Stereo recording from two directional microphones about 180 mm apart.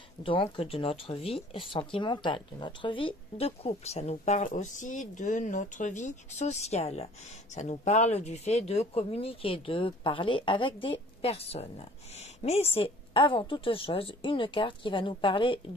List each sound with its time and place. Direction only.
0.2 s speech: 30° left (ahead or behind)